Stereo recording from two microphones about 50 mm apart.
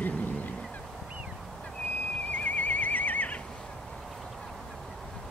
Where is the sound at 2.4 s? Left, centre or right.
Left.